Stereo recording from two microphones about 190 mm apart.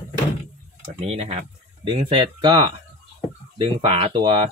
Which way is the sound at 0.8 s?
35° right (ahead or behind).